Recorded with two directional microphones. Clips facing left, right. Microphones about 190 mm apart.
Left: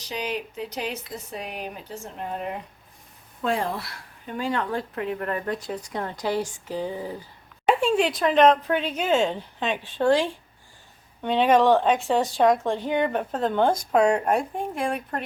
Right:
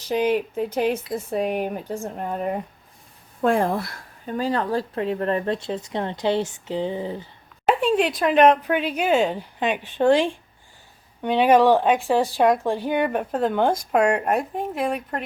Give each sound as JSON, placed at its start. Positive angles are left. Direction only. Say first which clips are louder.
{"t": 0.0, "sound": "speech", "louder": "right 9 dB", "side_deg": -50}
{"t": 7.6, "sound": "a sound", "louder": "right 1 dB", "side_deg": -5}
{"t": 8.2, "sound": "speech", "louder": "right 2 dB", "side_deg": -10}